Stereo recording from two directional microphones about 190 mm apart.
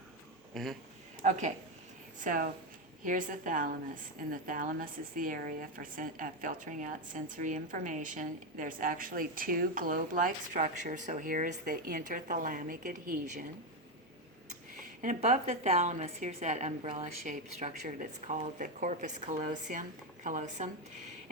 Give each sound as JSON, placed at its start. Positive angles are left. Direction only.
{"t": 0.5, "sound": "speech", "side_deg": 0}
{"t": 1.2, "sound": "a woman's voice", "side_deg": -40}
{"t": 14.8, "sound": "a woman's voice", "side_deg": -40}